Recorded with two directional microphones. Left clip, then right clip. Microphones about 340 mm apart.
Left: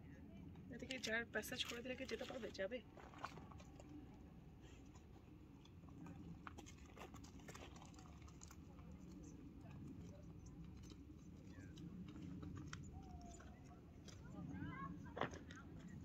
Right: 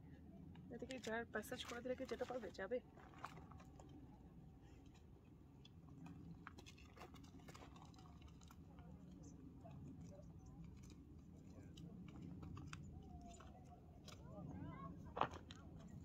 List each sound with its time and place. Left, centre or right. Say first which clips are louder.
0.7 s speech: left 2 dB; centre
14.5 s vehicle: left 5 dB; right
15.1 s a sound: right 4 dB; centre